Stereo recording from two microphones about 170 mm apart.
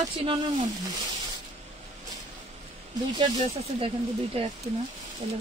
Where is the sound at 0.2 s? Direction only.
30° right (ahead or behind).